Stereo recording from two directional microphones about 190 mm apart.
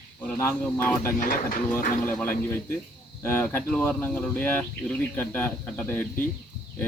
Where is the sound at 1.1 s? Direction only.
45° left (ahead or behind).